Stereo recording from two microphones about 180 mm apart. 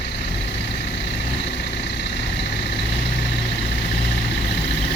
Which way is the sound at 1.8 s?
75° left (ahead or behind).